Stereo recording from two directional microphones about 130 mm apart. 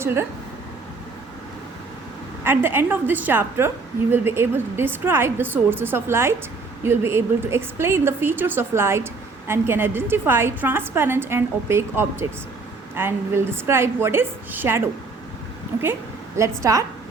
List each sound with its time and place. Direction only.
0.0 s speech: 20° right (ahead or behind)
2.4 s a woman's voice: 15° right (ahead or behind)
16.4 s a woman's voice: 25° right (ahead or behind)